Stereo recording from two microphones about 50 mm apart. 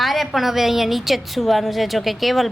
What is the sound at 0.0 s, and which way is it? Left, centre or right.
A woman's voice, centre.